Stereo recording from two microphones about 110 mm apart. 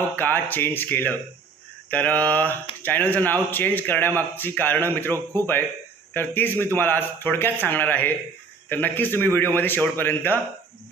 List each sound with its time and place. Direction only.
0.2 s a man's voice: 15° left (ahead or behind)